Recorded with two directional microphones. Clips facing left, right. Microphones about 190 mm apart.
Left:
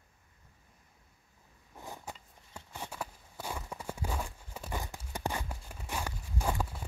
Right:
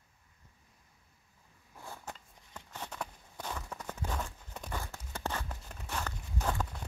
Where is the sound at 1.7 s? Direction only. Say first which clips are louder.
Left 1 dB; 15° left (ahead or behind).